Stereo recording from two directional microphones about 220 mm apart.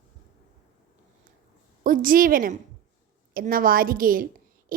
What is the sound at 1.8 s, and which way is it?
A woman's voice, 40° right (ahead or behind).